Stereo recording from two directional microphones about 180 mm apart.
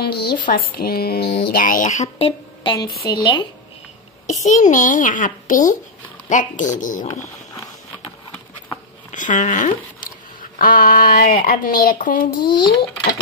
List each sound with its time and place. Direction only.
0.0 s speech: 60° left (ahead or behind)
1.5 s speech: 50° left (ahead or behind); by 3.4 s 25° left (ahead or behind)
4.4 s a child's voice: 40° left (ahead or behind)
7.1 s a sound: 20° left (ahead or behind)
9.1 s a child's voice: 45° left (ahead or behind)
12.4 s speech: 25° left (ahead or behind)